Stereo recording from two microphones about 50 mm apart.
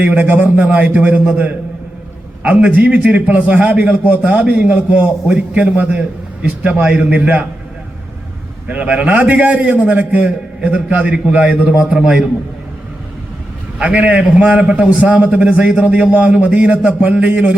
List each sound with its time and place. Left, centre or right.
0.0 s a man's voice: right
8.6 s a man's voice: right
11.9 s a man's voice: right
13.7 s a man's voice: right